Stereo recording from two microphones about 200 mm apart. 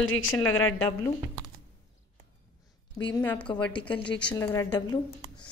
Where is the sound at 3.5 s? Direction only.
25° left (ahead or behind).